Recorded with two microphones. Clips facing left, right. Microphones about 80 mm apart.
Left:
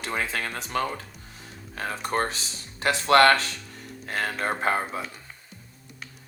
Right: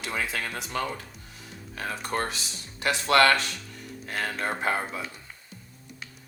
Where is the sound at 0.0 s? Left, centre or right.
Left.